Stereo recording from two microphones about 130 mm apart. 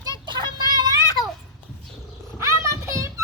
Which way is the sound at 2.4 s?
20° right (ahead or behind).